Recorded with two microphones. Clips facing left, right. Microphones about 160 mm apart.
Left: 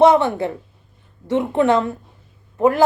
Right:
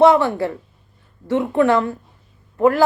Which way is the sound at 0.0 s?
20° left (ahead or behind).